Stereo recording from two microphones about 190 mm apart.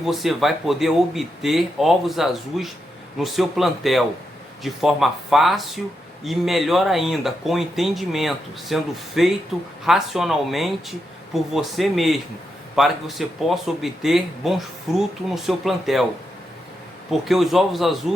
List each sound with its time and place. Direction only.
0.0 s speech: centre (ahead or behind)
17.1 s speech: centre (ahead or behind)